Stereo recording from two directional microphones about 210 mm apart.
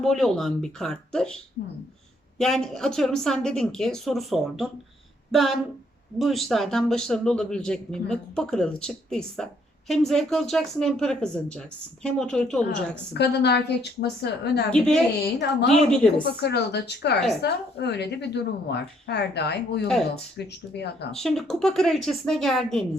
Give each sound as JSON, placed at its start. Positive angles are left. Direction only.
{"t": 0.0, "sound": "speech", "side_deg": 0}
{"t": 2.4, "sound": "speech", "side_deg": 0}
{"t": 13.1, "sound": "a woman's voice", "side_deg": 55}
{"t": 14.7, "sound": "speech", "side_deg": 5}
{"t": 16.4, "sound": "a woman's voice", "side_deg": 55}
{"t": 21.2, "sound": "speech", "side_deg": 0}